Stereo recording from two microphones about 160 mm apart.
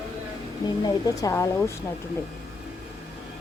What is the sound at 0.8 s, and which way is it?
Speech, 25° left (ahead or behind).